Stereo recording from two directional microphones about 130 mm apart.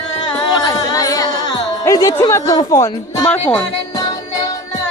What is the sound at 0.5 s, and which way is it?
Singing, 30° left (ahead or behind).